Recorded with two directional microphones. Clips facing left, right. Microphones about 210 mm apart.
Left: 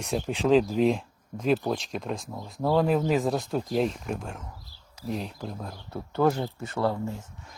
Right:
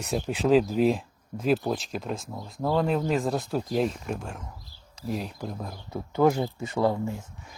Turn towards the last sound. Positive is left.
turn(degrees=-15)  # may be behind; listen again after turning